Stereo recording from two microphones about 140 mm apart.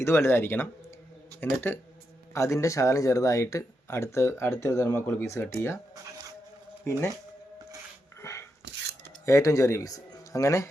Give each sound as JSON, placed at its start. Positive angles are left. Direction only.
{"t": 0.0, "sound": "speech", "side_deg": 20}
{"t": 6.9, "sound": "speech", "side_deg": 20}
{"t": 8.2, "sound": "a sound", "side_deg": 20}
{"t": 9.2, "sound": "speech", "side_deg": 20}